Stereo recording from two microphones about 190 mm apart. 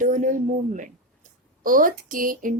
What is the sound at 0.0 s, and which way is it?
Speech, 45° right (ahead or behind).